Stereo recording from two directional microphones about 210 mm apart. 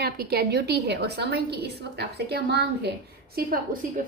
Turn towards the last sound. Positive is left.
turn(degrees=-45)  # may be behind; listen again after turning